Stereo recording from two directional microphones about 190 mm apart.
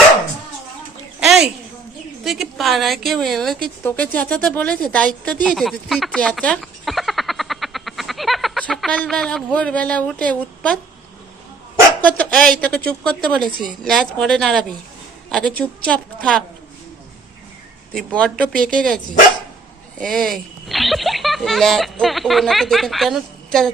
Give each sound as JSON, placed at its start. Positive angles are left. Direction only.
{"t": 1.2, "sound": "a sound", "side_deg": -5}
{"t": 2.2, "sound": "a woman's voice", "side_deg": 0}
{"t": 12.0, "sound": "a woman's voice", "side_deg": 5}
{"t": 17.9, "sound": "a woman's voice", "side_deg": 5}
{"t": 20.0, "sound": "speech", "side_deg": 5}